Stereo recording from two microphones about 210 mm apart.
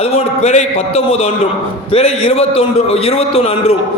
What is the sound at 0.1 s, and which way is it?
A man's voice, 30° left (ahead or behind).